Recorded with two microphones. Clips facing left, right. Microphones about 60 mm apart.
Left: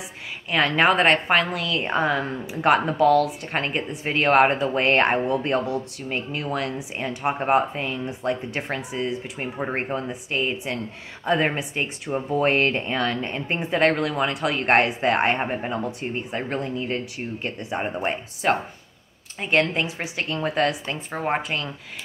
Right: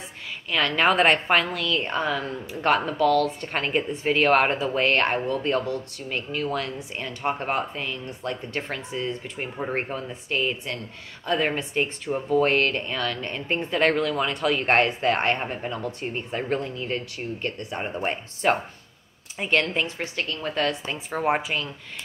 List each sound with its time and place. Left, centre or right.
0.5 s a woman's voice: centre
2.0 s speech: left
9.8 s speech: centre
11.5 s speech: centre
12.3 s speech: centre
15.3 s speech: left
16.2 s speech: centre
19.5 s speech: centre
21.1 s a woman's voice: centre